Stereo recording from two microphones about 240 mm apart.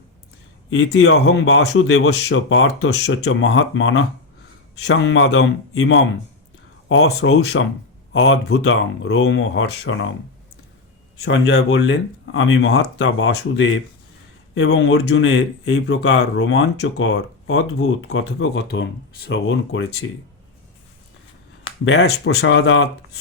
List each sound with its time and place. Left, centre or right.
0.7 s speech: left
7.6 s speech: left
11.2 s speech: left
21.8 s speech: left